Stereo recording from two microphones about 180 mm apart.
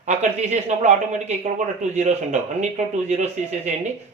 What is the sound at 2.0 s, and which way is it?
Speech, 40° right (ahead or behind).